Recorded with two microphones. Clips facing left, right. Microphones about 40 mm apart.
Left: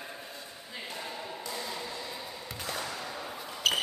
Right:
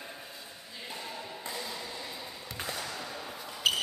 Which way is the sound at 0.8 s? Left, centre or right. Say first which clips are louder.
Left 1 dB; centre.